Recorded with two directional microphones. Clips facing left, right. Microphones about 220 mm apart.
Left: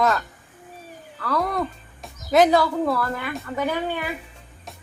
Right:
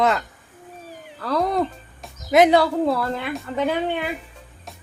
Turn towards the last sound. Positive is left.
turn(degrees=-25)  # may be behind; listen again after turning